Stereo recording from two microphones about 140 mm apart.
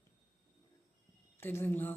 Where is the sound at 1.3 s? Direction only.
15° left (ahead or behind).